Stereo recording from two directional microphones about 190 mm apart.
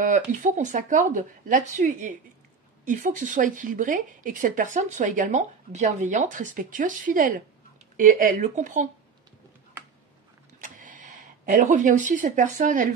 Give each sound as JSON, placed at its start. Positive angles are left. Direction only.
{"t": 0.0, "sound": "speech", "side_deg": -45}
{"t": 10.6, "sound": "speech", "side_deg": -45}